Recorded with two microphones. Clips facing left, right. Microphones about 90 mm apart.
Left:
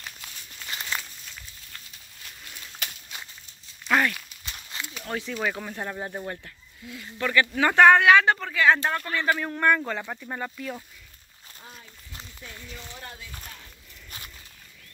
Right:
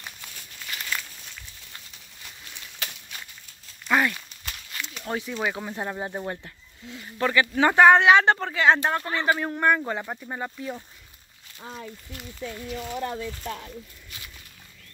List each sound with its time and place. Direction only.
0.7 s crumpling: 20° left (ahead or behind)
3.8 s a sound: centre (ahead or behind)
5.0 s speech: 20° right (ahead or behind)
12.7 s speech: 90° right